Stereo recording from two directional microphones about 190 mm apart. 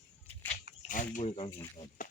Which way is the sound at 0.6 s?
45° left (ahead or behind).